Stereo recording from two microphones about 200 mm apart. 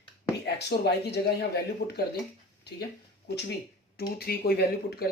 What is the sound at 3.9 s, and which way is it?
Speech, 50° left (ahead or behind).